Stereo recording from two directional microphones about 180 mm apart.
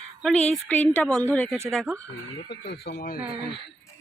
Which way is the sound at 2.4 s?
65° left (ahead or behind).